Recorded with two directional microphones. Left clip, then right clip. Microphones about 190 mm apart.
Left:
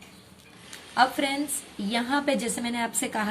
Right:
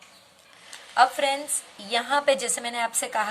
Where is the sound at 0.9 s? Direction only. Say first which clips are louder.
Right 3 dB; 20° right (ahead or behind).